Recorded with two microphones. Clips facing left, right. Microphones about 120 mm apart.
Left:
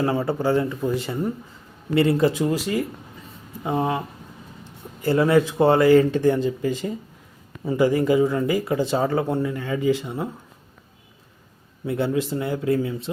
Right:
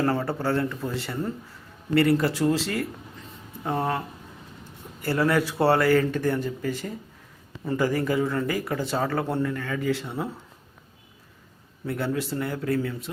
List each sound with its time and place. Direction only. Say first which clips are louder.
0.0 s speech: left 3 dB; 10° left (ahead or behind)
3.2 s a sound: left 2 dB; 5° left (ahead or behind)
5.0 s speech: left 5 dB; 20° left (ahead or behind)
11.9 s speech: left 5 dB; 20° left (ahead or behind)